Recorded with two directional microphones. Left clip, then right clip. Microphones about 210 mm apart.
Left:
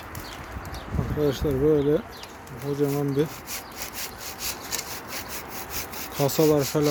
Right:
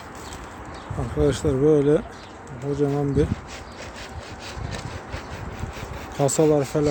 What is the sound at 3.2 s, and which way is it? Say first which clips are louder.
Speech: right 3 dB; centre (ahead or behind).